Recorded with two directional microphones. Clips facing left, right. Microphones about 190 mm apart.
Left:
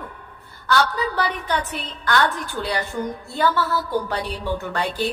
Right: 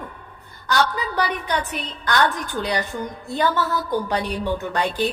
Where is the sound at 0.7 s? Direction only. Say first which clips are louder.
Left 1 dB; 15° right (ahead or behind).